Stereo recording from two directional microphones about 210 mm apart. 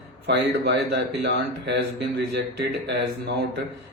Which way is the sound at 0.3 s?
55° right (ahead or behind).